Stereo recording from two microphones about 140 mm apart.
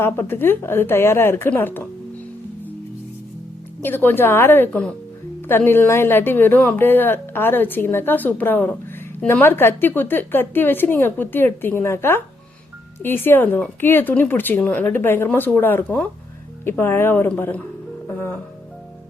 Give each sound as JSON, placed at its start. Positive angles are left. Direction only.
{"t": 0.0, "sound": "a woman's voice", "side_deg": 15}
{"t": 3.8, "sound": "a woman's voice", "side_deg": 15}